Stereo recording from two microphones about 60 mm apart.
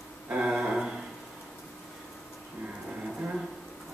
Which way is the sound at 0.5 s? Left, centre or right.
Centre.